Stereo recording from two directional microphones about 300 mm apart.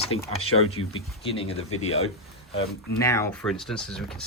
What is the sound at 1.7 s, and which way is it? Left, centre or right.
Speech, left.